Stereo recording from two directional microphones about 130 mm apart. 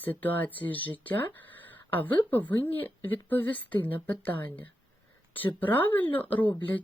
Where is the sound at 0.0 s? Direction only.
15° left (ahead or behind).